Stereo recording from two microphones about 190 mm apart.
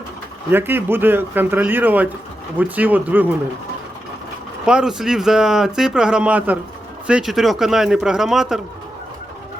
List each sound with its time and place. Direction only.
0.5 s a man's voice: 10° right (ahead or behind)
4.6 s speech: 5° right (ahead or behind)